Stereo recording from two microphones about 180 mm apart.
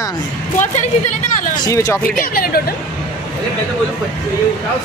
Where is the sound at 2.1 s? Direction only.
50° left (ahead or behind).